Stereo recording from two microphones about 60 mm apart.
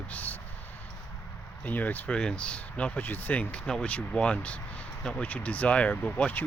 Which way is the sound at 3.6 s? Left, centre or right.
Centre.